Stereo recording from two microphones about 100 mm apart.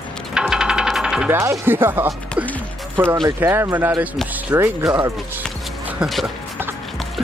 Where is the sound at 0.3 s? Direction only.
5° right (ahead or behind).